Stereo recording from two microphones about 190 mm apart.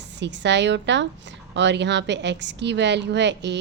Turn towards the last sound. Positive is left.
turn(degrees=-65)  # may be behind; listen again after turning